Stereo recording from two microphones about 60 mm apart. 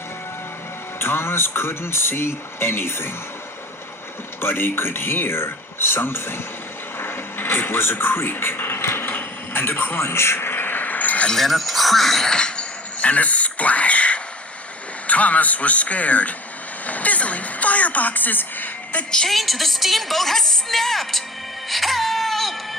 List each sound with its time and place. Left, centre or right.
0.9 s speech: left
4.4 s speech: left
7.0 s television: left
11.3 s a sound: centre; by 14.2 s left
15.0 s a man's voice: left
16.8 s a sound: left
19.1 s a woman's voice: centre
21.7 s music: centre